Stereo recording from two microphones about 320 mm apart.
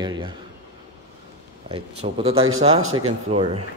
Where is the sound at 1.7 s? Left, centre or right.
Centre.